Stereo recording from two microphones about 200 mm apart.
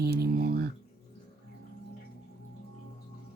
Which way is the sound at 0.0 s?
50° right (ahead or behind).